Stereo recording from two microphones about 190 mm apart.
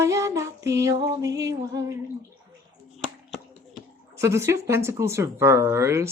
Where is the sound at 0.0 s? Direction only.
15° right (ahead or behind).